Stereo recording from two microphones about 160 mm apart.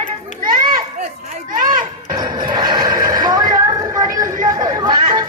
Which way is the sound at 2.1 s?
30° right (ahead or behind).